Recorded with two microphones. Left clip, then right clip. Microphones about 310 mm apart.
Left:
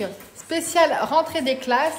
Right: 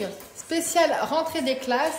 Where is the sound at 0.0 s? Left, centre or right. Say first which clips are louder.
Left 2 dB; left.